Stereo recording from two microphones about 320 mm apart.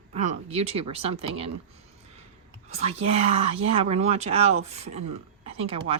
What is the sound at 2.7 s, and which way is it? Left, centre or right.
Speech, centre.